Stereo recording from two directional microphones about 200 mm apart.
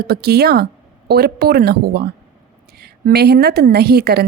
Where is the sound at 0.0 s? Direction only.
50° right (ahead or behind).